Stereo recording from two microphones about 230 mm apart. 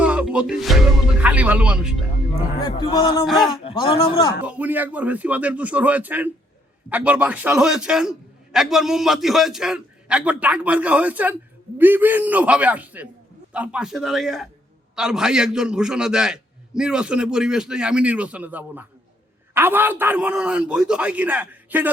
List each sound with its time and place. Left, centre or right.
0.0 s a man's voice: centre
2.7 s speech: centre
3.2 s a man's voice: centre
3.6 s speech: left
4.4 s a man's voice: centre